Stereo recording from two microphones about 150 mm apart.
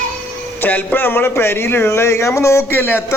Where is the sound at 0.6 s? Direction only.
10° left (ahead or behind).